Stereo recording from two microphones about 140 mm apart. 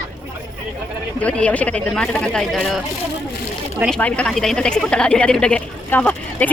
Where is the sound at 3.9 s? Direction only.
10° left (ahead or behind).